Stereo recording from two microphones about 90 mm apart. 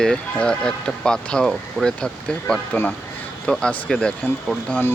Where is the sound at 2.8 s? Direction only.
30° left (ahead or behind).